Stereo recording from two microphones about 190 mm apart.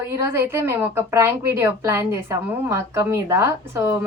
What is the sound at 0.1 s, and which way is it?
A woman's voice, 15° right (ahead or behind).